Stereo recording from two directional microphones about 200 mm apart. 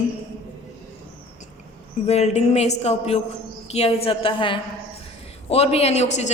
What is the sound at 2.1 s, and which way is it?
A woman's voice, 30° left (ahead or behind).